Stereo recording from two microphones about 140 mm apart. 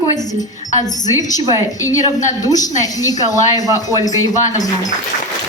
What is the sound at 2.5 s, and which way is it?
A woman's voice, 25° left (ahead or behind).